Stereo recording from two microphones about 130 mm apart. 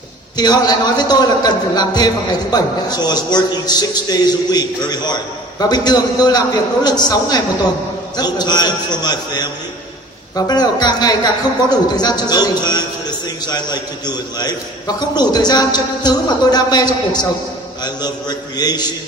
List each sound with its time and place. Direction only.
0.3 s a man's voice: 30° left (ahead or behind)